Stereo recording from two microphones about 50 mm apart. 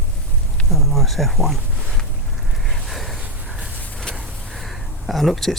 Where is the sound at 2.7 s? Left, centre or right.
Centre.